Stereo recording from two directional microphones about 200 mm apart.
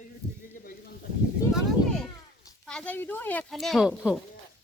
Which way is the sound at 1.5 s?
5° left (ahead or behind).